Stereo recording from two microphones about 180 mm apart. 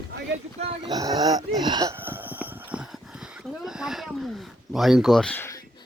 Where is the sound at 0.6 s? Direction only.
25° right (ahead or behind); by 5.5 s 10° left (ahead or behind).